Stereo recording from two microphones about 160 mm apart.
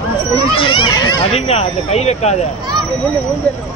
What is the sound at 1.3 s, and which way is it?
Speech, 40° left (ahead or behind).